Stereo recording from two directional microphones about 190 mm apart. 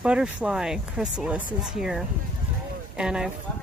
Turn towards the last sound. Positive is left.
turn(degrees=-5)  # may be behind; listen again after turning